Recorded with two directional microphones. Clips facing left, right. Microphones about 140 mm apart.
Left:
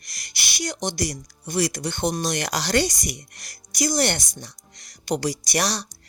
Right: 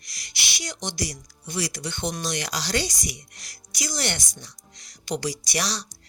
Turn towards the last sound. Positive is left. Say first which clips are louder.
# left 4 dB
turn(degrees=50)  # may be behind; listen again after turning